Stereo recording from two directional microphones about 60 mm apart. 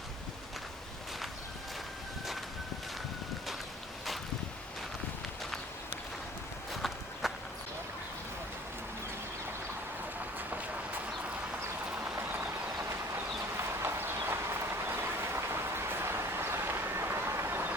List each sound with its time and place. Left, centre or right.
6.8 s walk: centre
11.9 s vehicle: right
14.0 s a sound: right